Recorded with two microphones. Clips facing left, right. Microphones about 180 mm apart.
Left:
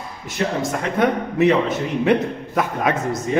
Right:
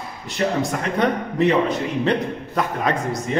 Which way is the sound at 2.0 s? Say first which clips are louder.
Left 6 dB; 10° left (ahead or behind).